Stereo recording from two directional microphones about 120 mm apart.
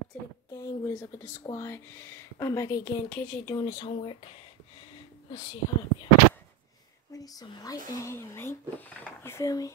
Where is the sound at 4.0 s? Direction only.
50° left (ahead or behind).